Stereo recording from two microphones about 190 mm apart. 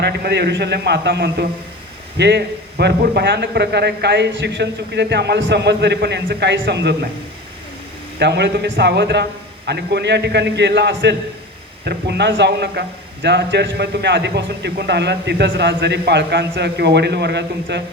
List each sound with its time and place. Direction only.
0.0 s a man's voice: 60° right (ahead or behind)
8.2 s a man's voice: 65° right (ahead or behind)